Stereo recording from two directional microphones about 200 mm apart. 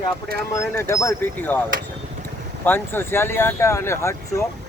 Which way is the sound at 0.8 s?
15° left (ahead or behind).